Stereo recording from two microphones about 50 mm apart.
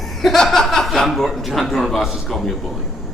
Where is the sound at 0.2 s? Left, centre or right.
Centre.